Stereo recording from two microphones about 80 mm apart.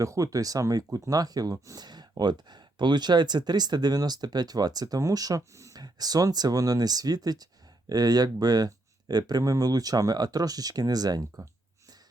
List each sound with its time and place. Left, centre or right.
0.0 s speech: right